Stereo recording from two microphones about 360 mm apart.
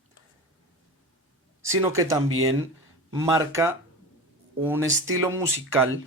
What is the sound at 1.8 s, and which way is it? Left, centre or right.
Speech, centre.